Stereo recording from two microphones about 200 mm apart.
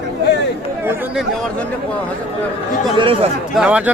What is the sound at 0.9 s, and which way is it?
Speech, 10° right (ahead or behind).